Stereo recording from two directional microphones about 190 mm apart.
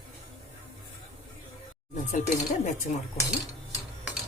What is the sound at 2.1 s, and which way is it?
Speech, 40° left (ahead or behind).